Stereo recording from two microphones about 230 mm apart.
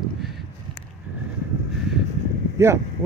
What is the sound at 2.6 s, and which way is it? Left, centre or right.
Speech, centre.